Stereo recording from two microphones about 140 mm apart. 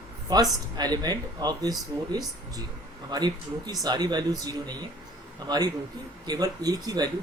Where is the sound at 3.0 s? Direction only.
30° right (ahead or behind).